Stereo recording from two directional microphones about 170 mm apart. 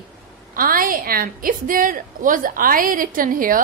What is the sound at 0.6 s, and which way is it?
A woman's voice, 55° right (ahead or behind).